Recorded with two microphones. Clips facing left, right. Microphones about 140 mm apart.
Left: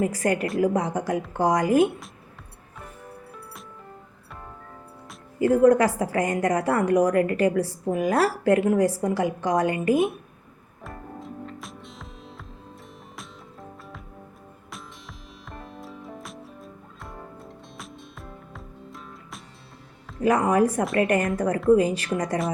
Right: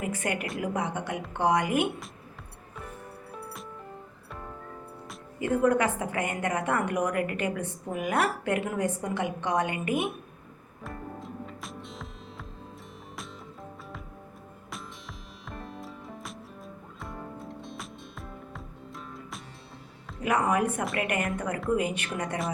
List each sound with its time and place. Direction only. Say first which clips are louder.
0.0 s a woman's voice: left 7 dB; 35° left (ahead or behind)
5.4 s a woman's voice: left 7 dB; 35° left (ahead or behind)
10.8 s music: left 1 dB; centre (ahead or behind)
14.7 s music: right 1 dB; centre (ahead or behind)
20.2 s a woman's voice: left 6 dB; 35° left (ahead or behind)